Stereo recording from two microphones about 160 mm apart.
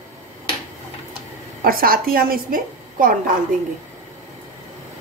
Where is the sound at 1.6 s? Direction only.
65° right (ahead or behind).